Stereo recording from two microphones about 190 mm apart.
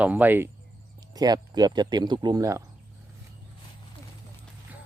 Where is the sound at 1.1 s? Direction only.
20° right (ahead or behind).